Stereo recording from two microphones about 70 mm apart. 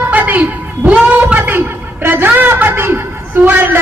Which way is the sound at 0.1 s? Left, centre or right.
Right.